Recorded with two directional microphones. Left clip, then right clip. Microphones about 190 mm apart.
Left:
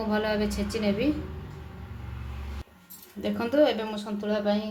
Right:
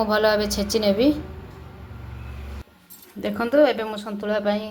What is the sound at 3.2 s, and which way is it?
A woman's voice, 20° right (ahead or behind).